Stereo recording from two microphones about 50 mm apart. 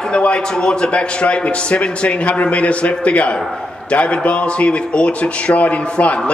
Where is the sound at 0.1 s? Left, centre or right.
Left.